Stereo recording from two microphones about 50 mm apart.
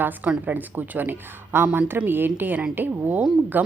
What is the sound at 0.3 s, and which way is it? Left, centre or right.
A woman's voice, right.